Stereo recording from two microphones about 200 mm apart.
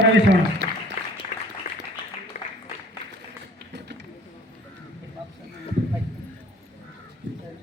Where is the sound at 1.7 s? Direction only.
40° left (ahead or behind).